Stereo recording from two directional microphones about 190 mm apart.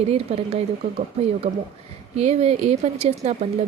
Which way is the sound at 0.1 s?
30° right (ahead or behind).